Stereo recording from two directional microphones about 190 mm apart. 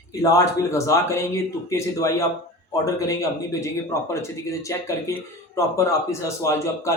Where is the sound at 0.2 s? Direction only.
15° left (ahead or behind).